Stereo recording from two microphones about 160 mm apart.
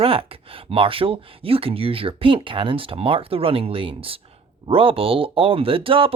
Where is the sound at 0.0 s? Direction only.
35° right (ahead or behind).